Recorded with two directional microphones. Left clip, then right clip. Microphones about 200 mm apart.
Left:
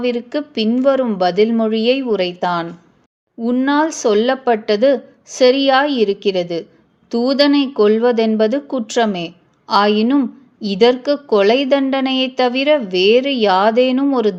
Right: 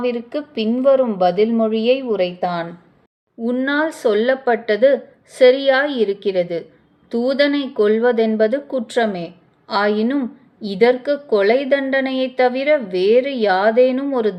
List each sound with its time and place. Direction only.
0.0 s a woman's voice: 35° left (ahead or behind)
3.4 s speech: 25° left (ahead or behind)